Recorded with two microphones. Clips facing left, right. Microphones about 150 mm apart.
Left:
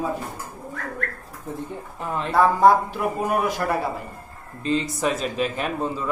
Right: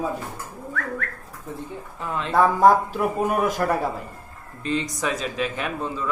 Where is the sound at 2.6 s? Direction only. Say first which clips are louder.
Even; 45° right (ahead or behind).